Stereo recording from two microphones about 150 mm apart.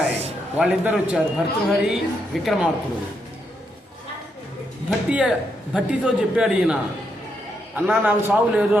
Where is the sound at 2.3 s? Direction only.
Centre (ahead or behind).